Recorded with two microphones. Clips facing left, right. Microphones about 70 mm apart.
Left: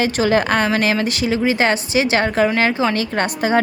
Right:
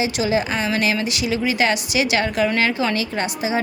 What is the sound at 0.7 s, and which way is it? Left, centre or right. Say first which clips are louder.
A woman's voice: left 3 dB; left.